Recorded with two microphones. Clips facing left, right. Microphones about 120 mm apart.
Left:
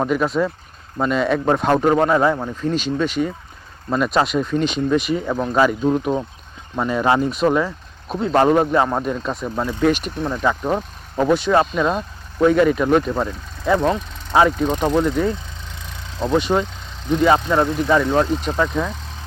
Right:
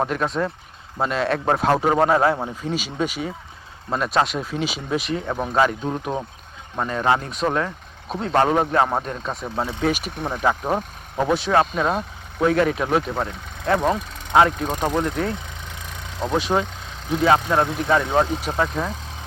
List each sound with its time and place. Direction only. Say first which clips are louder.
0.0 s a man's voice: left 4 dB; centre (ahead or behind)
10.2 s a man's voice: left 2 dB; 15° right (ahead or behind)
15.3 s vehicle: left 3 dB; 55° right (ahead or behind)
16.1 s speech: left 4 dB; 15° right (ahead or behind)
16.4 s speech: left 2 dB; centre (ahead or behind)
17.8 s a man's voice: left 2 dB; 10° right (ahead or behind)